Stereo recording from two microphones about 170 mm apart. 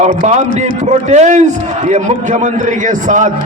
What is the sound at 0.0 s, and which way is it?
A man's voice, 40° right (ahead or behind).